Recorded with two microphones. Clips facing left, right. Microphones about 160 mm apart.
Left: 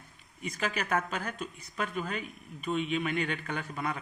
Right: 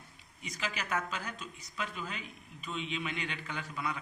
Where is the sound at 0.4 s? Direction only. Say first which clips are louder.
Left 6 dB; 55° left (ahead or behind).